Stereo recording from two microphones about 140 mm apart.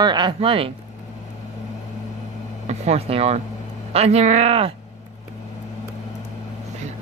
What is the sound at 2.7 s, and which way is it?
Speech, 50° right (ahead or behind).